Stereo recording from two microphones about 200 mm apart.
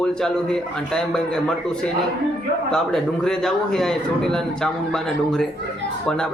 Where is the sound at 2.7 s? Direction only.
5° left (ahead or behind).